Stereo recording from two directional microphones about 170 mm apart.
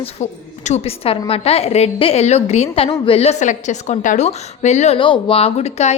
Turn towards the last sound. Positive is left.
turn(degrees=40)  # may be behind; listen again after turning